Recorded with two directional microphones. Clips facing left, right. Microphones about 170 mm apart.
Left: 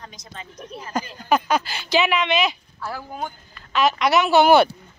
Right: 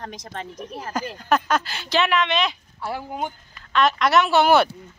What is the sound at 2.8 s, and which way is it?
Speech, 20° right (ahead or behind).